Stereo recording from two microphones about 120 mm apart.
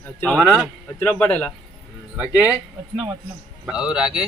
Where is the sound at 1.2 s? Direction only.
10° left (ahead or behind).